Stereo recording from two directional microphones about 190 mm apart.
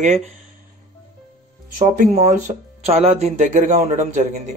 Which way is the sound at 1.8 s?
40° right (ahead or behind).